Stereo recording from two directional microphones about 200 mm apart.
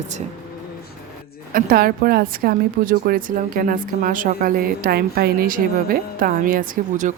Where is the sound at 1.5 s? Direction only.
45° right (ahead or behind).